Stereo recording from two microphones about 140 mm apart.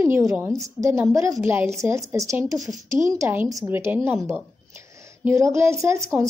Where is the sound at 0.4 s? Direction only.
25° right (ahead or behind).